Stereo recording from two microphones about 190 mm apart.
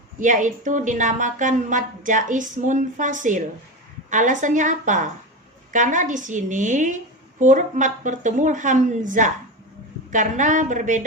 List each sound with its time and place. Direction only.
0.2 s a woman's voice: 40° right (ahead or behind)